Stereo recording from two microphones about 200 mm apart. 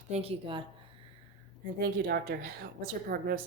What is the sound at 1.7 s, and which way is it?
Speech, 50° right (ahead or behind).